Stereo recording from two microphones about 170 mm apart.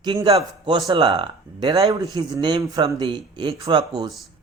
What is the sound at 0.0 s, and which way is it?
Speech, 25° right (ahead or behind).